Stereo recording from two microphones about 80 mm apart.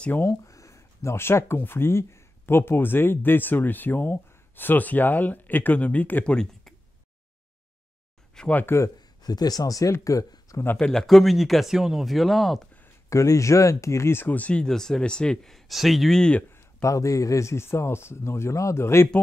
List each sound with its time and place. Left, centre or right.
0.2 s speech: left; by 6.3 s centre
6.3 s speech: centre
8.4 s speech: centre
8.6 s speech: left
9.2 s speech: left
10.8 s speech: centre
13.1 s speech: left; by 16.4 s centre
16.5 s speech: left